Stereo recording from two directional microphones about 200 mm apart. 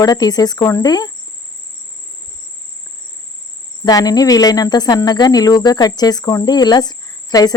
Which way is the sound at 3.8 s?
20° left (ahead or behind).